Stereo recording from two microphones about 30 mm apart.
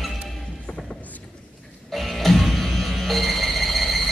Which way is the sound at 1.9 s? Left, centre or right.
Centre.